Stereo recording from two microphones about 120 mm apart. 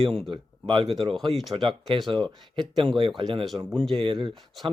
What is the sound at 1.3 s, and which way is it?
Speech, centre (ahead or behind).